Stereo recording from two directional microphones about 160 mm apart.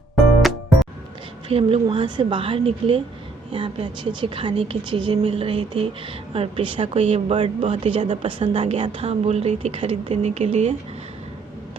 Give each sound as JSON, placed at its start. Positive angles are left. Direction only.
{"t": 1.5, "sound": "a woman's voice", "side_deg": -35}